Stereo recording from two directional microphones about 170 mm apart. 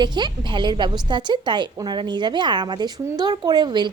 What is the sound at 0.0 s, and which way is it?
A woman's voice, 25° right (ahead or behind).